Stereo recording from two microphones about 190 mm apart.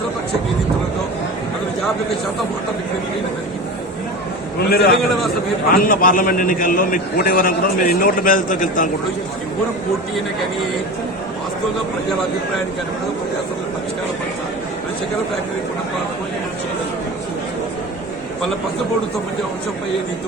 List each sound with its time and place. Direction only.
4.7 s a man's voice: 55° left (ahead or behind)